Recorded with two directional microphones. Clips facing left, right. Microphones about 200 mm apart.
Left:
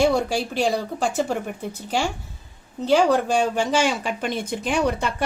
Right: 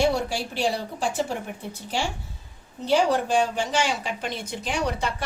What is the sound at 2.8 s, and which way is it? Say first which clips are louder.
Speech: left 3 dB; 50° left (ahead or behind).